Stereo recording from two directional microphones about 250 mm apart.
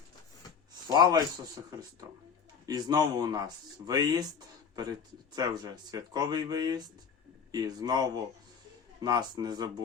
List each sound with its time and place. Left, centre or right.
0.9 s speech: centre
2.6 s speech: centre